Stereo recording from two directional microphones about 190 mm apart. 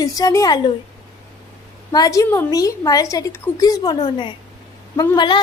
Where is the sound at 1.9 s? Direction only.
20° left (ahead or behind).